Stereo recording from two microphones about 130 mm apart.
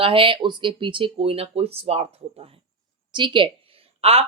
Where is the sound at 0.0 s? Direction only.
45° right (ahead or behind).